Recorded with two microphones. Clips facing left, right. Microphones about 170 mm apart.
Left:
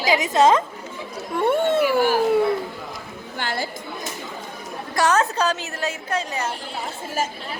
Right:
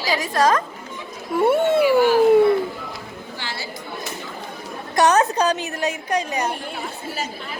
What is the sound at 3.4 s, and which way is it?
Chatter, 50° left (ahead or behind).